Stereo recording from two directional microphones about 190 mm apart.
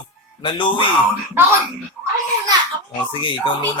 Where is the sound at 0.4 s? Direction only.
25° left (ahead or behind).